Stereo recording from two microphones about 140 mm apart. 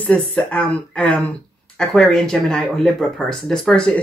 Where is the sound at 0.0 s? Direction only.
10° left (ahead or behind).